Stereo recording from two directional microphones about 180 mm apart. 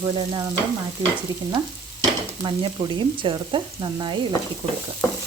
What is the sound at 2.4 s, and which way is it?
Frying, 25° right (ahead or behind).